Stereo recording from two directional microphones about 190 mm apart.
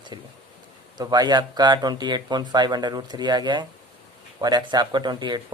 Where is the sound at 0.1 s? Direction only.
25° right (ahead or behind).